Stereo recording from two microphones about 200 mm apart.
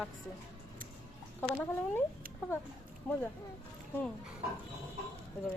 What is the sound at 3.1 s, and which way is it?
Speech, 10° left (ahead or behind).